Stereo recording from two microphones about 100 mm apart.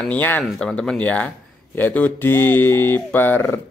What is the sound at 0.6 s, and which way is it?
Speech, 5° left (ahead or behind).